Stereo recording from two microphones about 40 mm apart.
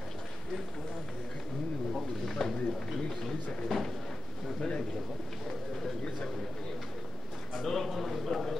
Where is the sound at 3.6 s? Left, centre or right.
Centre.